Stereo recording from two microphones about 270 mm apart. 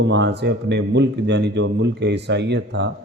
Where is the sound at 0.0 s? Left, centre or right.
Right.